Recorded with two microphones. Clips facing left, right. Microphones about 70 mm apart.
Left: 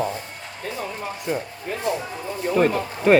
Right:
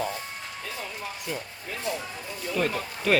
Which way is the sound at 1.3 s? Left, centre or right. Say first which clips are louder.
Left 9 dB; left.